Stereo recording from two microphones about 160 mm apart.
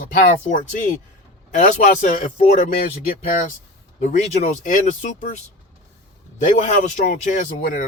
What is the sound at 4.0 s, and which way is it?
Speech, 50° left (ahead or behind).